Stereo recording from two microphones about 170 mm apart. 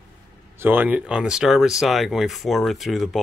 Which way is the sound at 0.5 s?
10° right (ahead or behind).